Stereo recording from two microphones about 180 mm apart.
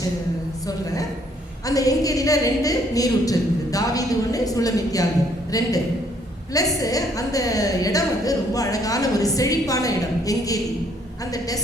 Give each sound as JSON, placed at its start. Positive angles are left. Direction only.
{"t": 1.6, "sound": "a woman's voice", "side_deg": 20}